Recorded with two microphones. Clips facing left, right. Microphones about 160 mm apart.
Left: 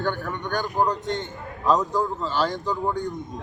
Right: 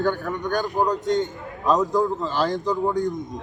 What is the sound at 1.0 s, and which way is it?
Speech, 40° right (ahead or behind).